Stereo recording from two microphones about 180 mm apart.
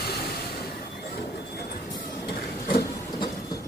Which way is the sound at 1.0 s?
65° left (ahead or behind).